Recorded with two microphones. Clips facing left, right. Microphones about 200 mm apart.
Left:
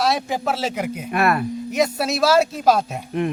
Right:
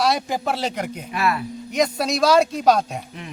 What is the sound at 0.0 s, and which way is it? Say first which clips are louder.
Speech: even; centre (ahead or behind).